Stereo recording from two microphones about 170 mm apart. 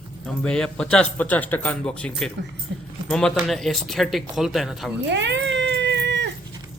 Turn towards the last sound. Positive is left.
turn(degrees=-90)